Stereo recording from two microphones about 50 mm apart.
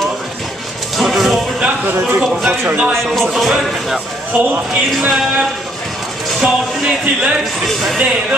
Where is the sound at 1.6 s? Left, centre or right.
Right.